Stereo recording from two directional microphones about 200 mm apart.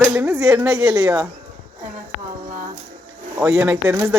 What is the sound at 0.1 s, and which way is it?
Speech, 10° right (ahead or behind).